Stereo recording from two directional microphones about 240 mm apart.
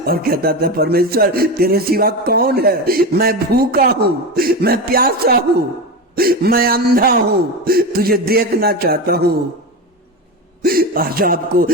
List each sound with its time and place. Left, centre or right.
0.0 s speech: right
10.6 s speech: right